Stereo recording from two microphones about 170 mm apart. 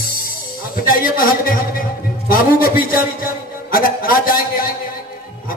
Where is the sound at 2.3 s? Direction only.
55° left (ahead or behind).